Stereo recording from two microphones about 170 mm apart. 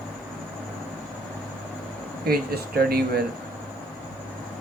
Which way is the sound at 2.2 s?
65° right (ahead or behind).